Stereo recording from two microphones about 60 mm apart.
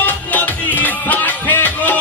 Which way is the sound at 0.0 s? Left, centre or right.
Left.